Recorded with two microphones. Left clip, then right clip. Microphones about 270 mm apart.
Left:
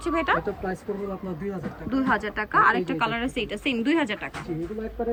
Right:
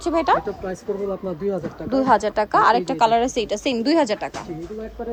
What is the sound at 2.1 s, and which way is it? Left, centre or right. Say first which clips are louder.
A woman's voice: right 8 dB; right.